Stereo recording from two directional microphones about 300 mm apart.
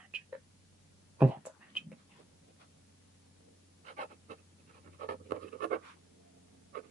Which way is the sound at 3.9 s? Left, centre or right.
Right.